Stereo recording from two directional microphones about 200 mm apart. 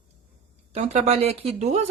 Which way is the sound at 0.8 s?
30° right (ahead or behind).